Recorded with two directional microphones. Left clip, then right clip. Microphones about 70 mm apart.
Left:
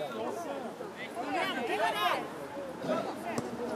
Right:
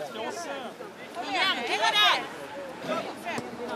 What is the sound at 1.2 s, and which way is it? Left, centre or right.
A man's voice, left.